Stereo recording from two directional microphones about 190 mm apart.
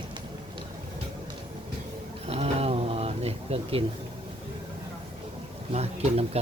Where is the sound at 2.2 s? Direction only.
35° right (ahead or behind).